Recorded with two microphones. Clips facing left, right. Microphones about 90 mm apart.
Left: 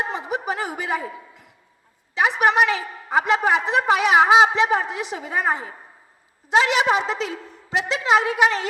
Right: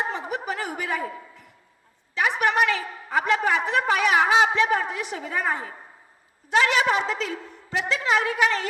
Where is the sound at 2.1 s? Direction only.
20° left (ahead or behind).